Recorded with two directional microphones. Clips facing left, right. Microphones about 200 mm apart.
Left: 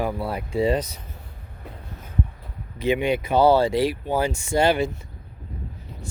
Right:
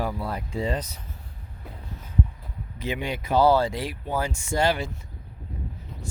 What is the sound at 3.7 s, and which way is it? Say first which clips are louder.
Speech: left 10 dB; 80° left.